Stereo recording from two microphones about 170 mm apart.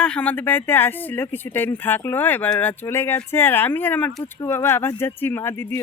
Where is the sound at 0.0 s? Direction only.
5° left (ahead or behind).